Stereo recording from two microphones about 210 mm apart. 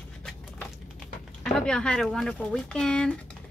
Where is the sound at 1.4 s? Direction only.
5° left (ahead or behind).